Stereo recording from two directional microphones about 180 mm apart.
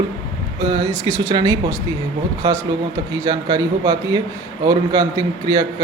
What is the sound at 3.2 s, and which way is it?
A man's voice, 20° right (ahead or behind).